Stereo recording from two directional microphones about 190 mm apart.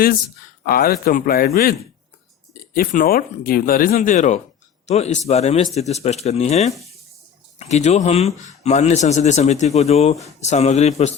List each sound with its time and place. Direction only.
0.6 s speech: 50° left (ahead or behind)
2.7 s speech: 50° left (ahead or behind)